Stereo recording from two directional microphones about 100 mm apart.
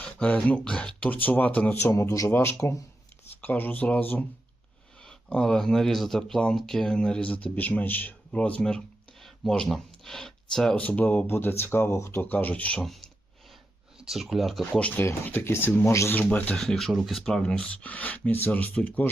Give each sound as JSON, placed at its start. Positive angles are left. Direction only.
{"t": 0.0, "sound": "speech", "side_deg": 10}
{"t": 1.8, "sound": "speech", "side_deg": 25}
{"t": 10.8, "sound": "speech", "side_deg": 15}
{"t": 12.8, "sound": "speech", "side_deg": 0}
{"t": 14.6, "sound": "speech", "side_deg": 15}
{"t": 16.6, "sound": "speech", "side_deg": 0}